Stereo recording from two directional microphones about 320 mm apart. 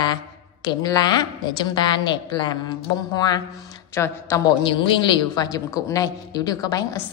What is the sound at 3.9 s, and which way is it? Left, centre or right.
A woman's voice, centre.